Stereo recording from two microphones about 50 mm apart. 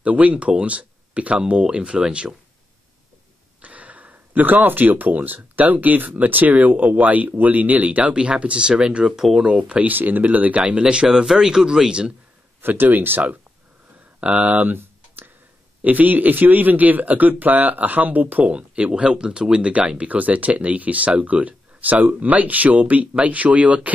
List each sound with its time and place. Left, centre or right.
0.0 s speech: right
3.6 s speech: right; by 9.5 s centre
9.6 s speech: right
10.6 s speech: right
12.6 s speech: right
14.2 s a sound: right
15.8 s speech: right
18.5 s speech: right